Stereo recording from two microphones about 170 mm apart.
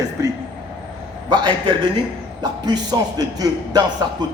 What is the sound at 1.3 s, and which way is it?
A man's voice, 25° right (ahead or behind).